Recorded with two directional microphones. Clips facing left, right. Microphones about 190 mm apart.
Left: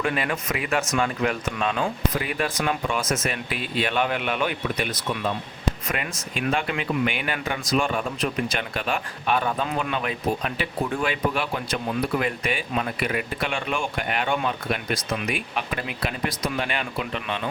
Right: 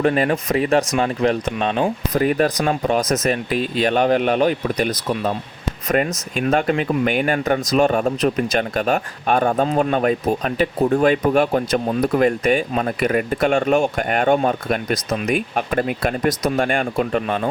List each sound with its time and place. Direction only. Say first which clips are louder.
0.0 s speech: right 8 dB; 40° right (ahead or behind)